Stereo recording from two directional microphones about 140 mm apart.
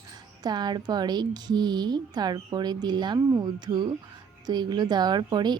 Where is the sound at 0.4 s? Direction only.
30° right (ahead or behind).